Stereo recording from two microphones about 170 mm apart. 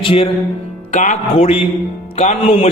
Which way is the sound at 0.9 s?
45° left (ahead or behind).